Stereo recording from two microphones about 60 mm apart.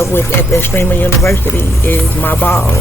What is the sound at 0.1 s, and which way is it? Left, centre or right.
Speech, left.